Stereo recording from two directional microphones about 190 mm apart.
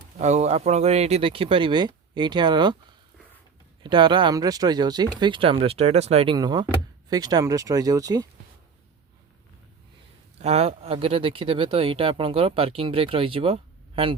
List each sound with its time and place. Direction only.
0.2 s speech: 35° right (ahead or behind)
3.8 s speech: 25° right (ahead or behind)
6.3 s speech: 20° right (ahead or behind)
10.3 s speech: 35° right (ahead or behind)